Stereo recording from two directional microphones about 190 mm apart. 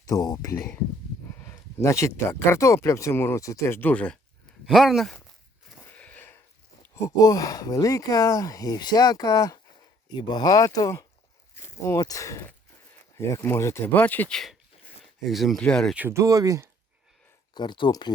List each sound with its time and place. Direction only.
0.0 s speech: 20° left (ahead or behind); by 5.2 s centre (ahead or behind)
5.8 s a sound: 10° left (ahead or behind)
6.9 s speech: 15° left (ahead or behind)
16.0 s speech: 15° right (ahead or behind)
17.5 s speech: 25° left (ahead or behind)